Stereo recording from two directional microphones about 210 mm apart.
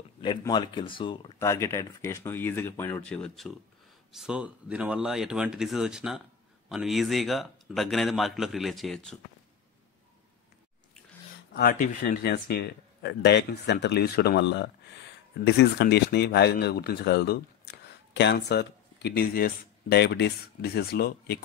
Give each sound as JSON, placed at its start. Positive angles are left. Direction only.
{"t": 0.2, "sound": "speech", "side_deg": 20}
{"t": 11.5, "sound": "speech", "side_deg": 45}